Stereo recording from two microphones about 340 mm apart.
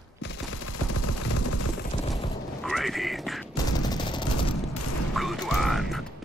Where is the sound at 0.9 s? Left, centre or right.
Left.